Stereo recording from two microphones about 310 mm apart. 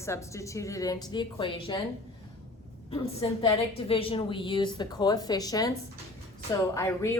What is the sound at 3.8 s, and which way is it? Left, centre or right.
A woman's voice, centre.